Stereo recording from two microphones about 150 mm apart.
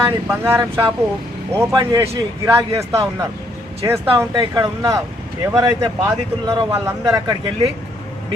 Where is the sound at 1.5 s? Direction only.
25° right (ahead or behind).